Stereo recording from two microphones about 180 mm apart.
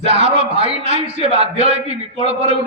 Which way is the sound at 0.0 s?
35° right (ahead or behind).